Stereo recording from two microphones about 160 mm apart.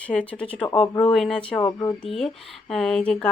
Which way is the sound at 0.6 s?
30° left (ahead or behind).